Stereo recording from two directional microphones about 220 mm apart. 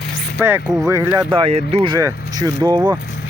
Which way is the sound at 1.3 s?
25° right (ahead or behind).